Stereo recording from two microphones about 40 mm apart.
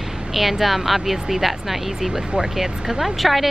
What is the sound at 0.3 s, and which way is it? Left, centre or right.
Speech, centre.